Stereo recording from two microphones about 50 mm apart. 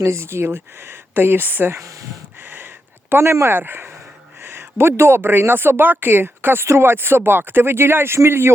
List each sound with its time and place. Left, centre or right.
0.0 s speech: right
1.7 s speech: right
3.1 s speech: right